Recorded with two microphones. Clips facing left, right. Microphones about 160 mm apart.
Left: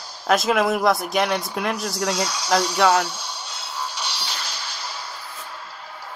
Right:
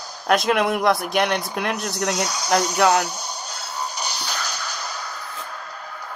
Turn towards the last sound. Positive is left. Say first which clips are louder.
# right 3 dB
turn(degrees=-45)  # may be behind; listen again after turning